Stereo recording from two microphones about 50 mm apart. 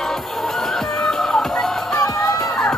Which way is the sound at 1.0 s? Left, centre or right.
Centre.